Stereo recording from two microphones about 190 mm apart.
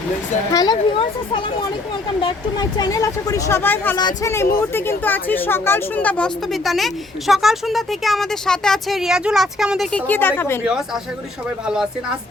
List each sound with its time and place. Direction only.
0.5 s speech: 20° left (ahead or behind)
2.7 s speech: 20° left (ahead or behind)
10.6 s speech: 5° right (ahead or behind)